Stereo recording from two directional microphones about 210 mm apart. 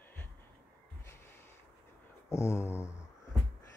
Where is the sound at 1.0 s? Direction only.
10° left (ahead or behind).